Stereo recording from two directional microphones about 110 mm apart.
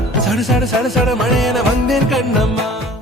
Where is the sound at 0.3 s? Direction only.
Centre (ahead or behind).